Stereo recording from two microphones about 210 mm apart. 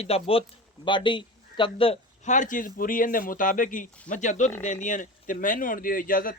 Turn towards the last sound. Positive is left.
turn(degrees=40)  # may be behind; listen again after turning